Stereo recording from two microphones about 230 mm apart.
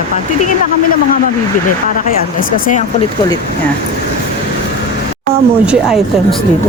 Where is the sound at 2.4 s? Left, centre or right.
Left.